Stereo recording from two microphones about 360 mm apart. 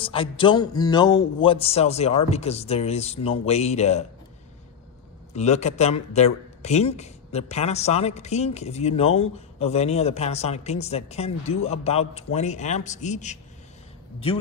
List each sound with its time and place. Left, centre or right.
0.0 s a man's voice: centre
5.3 s a man's voice: centre